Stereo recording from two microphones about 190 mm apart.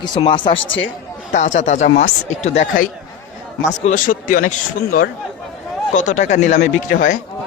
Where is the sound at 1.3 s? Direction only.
40° left (ahead or behind).